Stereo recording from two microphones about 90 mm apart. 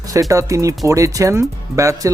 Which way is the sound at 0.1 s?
40° right (ahead or behind).